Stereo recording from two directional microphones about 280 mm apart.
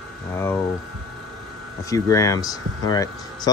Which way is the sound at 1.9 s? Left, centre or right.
Centre.